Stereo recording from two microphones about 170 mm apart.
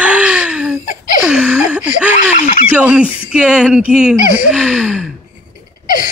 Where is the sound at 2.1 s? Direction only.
45° left (ahead or behind).